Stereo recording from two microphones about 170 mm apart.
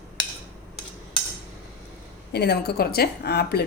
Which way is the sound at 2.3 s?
75° left (ahead or behind).